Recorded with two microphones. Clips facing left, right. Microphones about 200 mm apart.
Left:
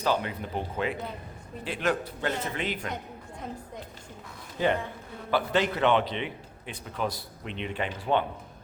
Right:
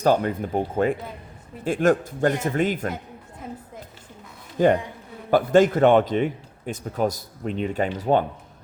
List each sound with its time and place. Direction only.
0.0 s a man's voice: 45° right (ahead or behind)
4.5 s a man's voice: 45° right (ahead or behind)